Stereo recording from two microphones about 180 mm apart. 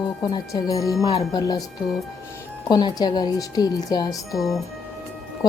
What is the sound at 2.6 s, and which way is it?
A woman's voice, 25° left (ahead or behind).